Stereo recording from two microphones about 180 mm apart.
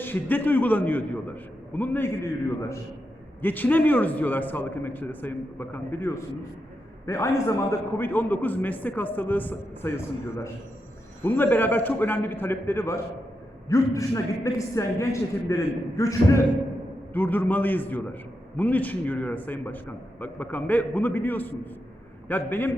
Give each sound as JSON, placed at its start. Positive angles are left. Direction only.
{"t": 0.0, "sound": "a man's voice", "side_deg": 10}